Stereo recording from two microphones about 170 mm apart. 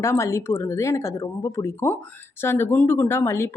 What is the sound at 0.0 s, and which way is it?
Speech, 15° left (ahead or behind).